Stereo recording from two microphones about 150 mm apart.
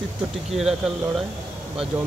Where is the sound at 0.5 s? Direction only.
5° right (ahead or behind).